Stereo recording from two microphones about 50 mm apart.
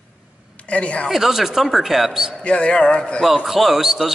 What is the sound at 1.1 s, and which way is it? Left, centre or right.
Speech, centre.